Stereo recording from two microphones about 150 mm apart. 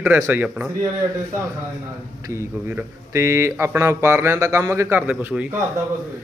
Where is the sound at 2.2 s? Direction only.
20° right (ahead or behind).